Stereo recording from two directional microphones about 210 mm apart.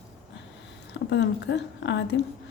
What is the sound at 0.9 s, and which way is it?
Speech, 55° left (ahead or behind).